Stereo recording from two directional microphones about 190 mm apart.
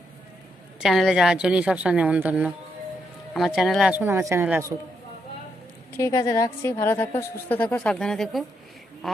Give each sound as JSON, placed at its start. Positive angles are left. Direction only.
{"t": 0.8, "sound": "a woman's voice", "side_deg": 0}
{"t": 6.0, "sound": "a woman's voice", "side_deg": 15}